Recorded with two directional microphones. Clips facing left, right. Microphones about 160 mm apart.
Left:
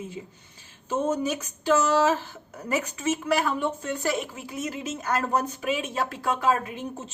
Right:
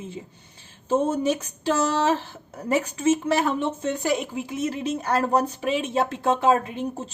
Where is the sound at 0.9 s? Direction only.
30° right (ahead or behind).